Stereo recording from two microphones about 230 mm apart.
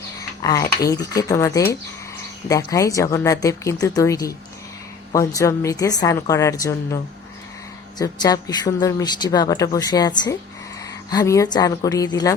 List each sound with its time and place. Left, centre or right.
0.2 s speech: centre